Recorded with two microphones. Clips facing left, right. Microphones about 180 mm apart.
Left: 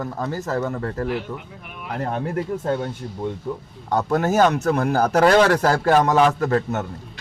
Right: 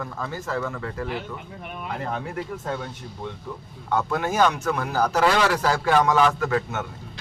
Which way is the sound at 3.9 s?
40° left (ahead or behind).